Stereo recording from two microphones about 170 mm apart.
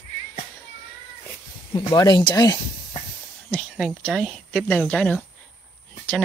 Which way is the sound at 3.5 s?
5° left (ahead or behind).